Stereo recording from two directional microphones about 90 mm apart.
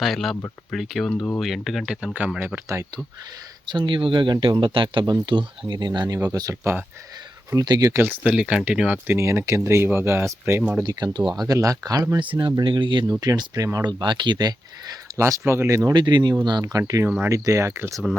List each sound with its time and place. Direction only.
0.0 s speech: centre (ahead or behind)
3.7 s speech: 65° right (ahead or behind); by 6.5 s 45° right (ahead or behind)
6.5 s speech: 30° right (ahead or behind)
7.5 s speech: 45° right (ahead or behind)
7.9 s speech: 20° right (ahead or behind)
8.2 s speech: 10° right (ahead or behind)
9.0 s speech: 30° right (ahead or behind)
10.8 s speech: 50° right (ahead or behind)
12.2 s speech: 65° right (ahead or behind)
13.1 s speech: 45° right (ahead or behind)
15.1 s speech: 35° right (ahead or behind)
15.9 s speech: 55° right (ahead or behind); by 18.0 s 30° right (ahead or behind)